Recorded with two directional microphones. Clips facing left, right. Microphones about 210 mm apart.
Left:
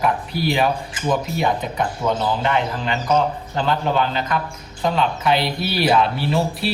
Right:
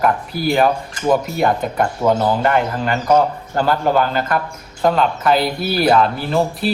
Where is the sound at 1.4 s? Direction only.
45° right (ahead or behind).